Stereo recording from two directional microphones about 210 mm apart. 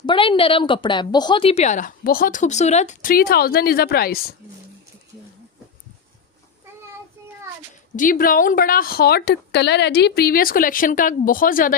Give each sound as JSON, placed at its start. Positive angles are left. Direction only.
{"t": 0.0, "sound": "a woman's voice", "side_deg": 25}
{"t": 7.9, "sound": "a woman's voice", "side_deg": 40}